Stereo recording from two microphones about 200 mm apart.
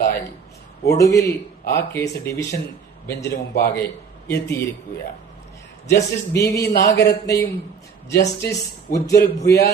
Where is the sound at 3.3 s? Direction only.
50° left (ahead or behind).